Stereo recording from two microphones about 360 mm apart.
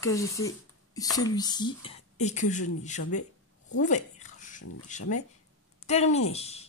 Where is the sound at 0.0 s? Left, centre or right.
Centre.